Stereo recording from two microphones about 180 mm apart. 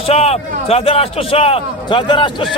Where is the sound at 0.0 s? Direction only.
35° left (ahead or behind).